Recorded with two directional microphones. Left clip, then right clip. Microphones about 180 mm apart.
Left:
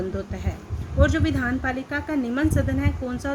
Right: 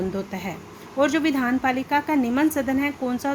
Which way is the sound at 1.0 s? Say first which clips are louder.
Right 2 dB; 45° right (ahead or behind).